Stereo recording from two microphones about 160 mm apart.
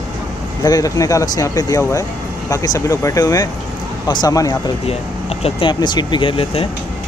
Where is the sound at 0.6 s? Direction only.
20° left (ahead or behind).